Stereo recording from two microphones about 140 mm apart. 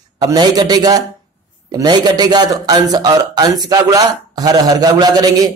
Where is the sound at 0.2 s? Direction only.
30° right (ahead or behind).